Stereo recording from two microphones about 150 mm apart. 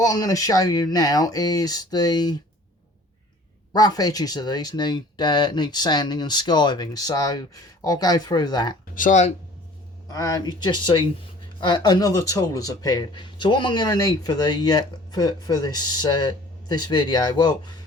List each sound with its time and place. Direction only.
0.0 s speech: 25° left (ahead or behind)
3.7 s speech: 25° left (ahead or behind)
9.0 s speech: 55° left (ahead or behind)
10.1 s speech: 25° left (ahead or behind)